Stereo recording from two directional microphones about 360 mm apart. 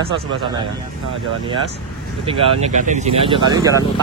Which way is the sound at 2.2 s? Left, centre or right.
Centre.